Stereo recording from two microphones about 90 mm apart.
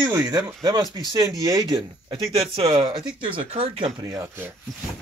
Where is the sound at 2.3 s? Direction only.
80° right.